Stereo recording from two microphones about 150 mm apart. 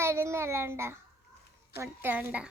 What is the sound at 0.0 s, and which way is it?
Speech, 15° right (ahead or behind).